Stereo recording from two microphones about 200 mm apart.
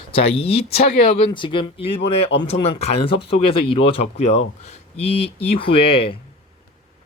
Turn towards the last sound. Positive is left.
turn(degrees=25)  # may be behind; listen again after turning